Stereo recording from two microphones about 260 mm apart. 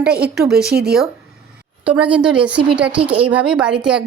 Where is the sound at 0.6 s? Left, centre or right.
Right.